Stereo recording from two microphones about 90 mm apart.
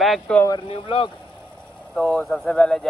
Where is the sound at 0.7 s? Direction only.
80° left.